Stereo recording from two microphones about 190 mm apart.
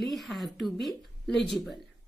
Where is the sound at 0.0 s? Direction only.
Centre (ahead or behind).